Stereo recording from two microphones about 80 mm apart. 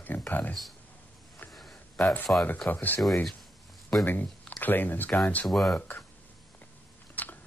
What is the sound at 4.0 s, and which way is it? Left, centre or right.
Speech, left.